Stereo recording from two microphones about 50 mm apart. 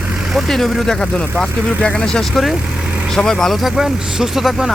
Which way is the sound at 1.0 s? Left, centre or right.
Centre.